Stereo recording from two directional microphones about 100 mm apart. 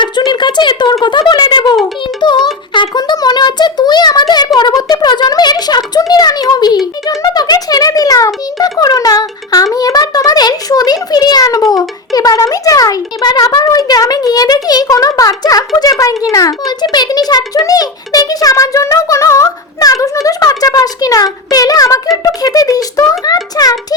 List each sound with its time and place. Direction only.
0.0 s speech: 50° left (ahead or behind)
2.2 s music: 50° left (ahead or behind)
2.7 s a child's voice: 50° left (ahead or behind)
7.0 s a sound: 35° left (ahead or behind)
8.8 s music: 40° left (ahead or behind)
9.7 s a sound: 40° left (ahead or behind)
22.2 s music: 35° left (ahead or behind)